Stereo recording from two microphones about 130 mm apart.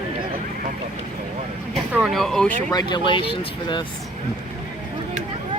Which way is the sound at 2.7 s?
30° left (ahead or behind).